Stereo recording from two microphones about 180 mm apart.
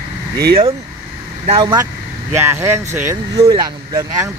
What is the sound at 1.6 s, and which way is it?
Speech, 25° right (ahead or behind).